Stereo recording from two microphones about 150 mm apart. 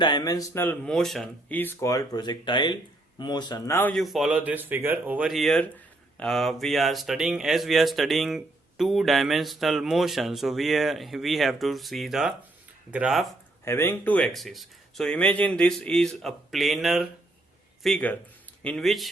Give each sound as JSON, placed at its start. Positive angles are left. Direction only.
{"t": 0.0, "sound": "speech", "side_deg": 30}
{"t": 1.5, "sound": "speech", "side_deg": 15}
{"t": 3.8, "sound": "speech", "side_deg": 10}
{"t": 4.0, "sound": "speech", "side_deg": 0}
{"t": 13.7, "sound": "speech", "side_deg": 15}